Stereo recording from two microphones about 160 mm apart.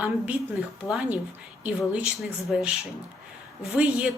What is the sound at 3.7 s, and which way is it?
Speech, 5° right (ahead or behind).